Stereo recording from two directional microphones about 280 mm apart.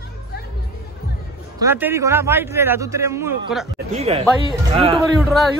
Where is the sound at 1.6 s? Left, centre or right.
Centre.